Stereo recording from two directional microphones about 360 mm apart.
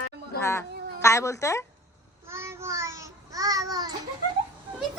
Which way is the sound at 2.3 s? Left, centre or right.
Centre.